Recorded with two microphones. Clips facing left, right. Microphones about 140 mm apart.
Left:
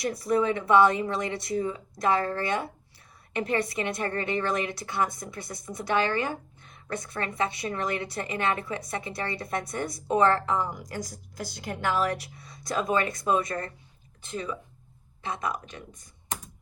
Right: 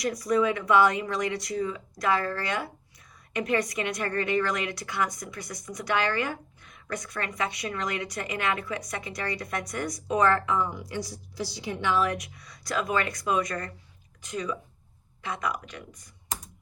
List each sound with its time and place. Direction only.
0.0 s a woman's voice: 30° left (ahead or behind)